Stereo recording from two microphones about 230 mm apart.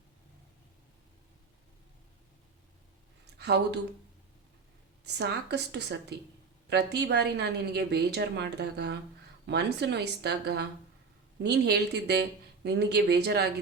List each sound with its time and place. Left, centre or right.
3.3 s speech: right
5.0 s a woman's voice: right